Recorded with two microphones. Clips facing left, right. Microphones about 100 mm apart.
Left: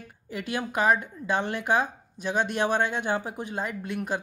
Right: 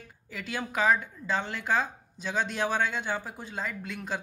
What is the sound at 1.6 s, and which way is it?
Speech, 15° left (ahead or behind).